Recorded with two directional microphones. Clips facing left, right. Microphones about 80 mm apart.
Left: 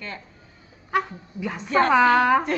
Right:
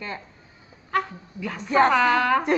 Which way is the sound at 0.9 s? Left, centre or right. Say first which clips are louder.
Left 1 dB; centre.